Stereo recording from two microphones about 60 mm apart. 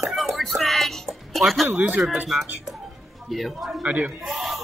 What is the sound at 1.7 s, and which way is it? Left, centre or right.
Speech, right.